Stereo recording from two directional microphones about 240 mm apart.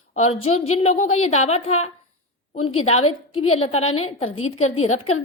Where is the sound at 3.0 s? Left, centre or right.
Left.